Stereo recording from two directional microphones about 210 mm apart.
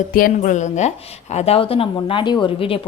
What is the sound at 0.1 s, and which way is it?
A woman's voice, 40° left (ahead or behind).